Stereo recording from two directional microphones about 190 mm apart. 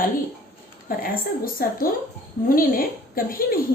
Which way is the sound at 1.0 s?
50° left (ahead or behind).